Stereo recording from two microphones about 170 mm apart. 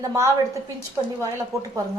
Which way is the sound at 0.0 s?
20° right (ahead or behind).